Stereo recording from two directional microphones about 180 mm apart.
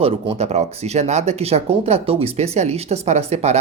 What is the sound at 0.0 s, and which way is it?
Speech, 35° right (ahead or behind).